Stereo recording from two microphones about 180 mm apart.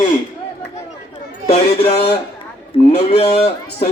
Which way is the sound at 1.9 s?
65° left (ahead or behind).